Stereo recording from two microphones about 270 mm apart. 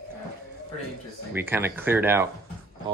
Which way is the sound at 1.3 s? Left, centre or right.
Centre.